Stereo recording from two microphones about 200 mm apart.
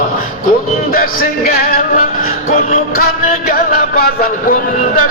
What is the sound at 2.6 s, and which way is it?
Music, 45° left (ahead or behind).